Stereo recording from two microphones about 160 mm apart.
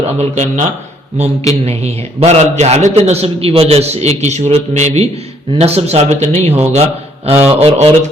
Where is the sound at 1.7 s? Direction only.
40° right (ahead or behind).